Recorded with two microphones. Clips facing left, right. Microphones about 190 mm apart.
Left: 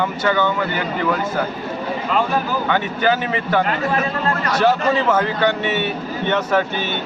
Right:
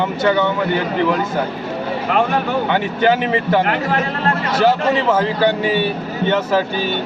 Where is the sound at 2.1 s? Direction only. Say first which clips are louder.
Right 2 dB; 65° right (ahead or behind).